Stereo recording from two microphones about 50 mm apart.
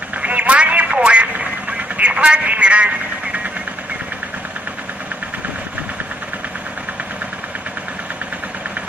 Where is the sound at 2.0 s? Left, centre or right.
Right.